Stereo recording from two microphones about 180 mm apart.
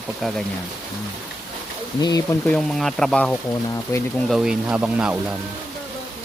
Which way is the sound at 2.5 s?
Centre (ahead or behind).